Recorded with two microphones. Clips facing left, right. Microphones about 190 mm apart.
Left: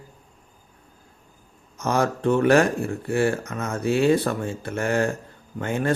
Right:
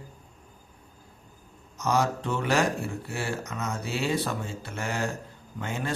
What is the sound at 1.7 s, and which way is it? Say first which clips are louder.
A man's voice: left 3 dB; 55° left (ahead or behind).